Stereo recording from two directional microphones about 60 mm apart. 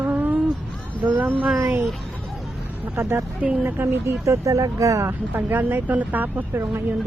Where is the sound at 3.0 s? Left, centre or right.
Right.